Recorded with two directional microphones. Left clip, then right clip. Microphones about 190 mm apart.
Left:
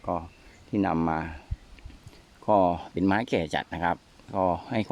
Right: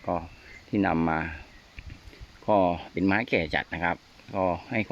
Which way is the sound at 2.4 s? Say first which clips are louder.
Left 1 dB; 10° left (ahead or behind).